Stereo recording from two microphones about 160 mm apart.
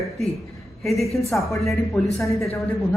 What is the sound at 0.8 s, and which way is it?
A woman's voice, centre (ahead or behind).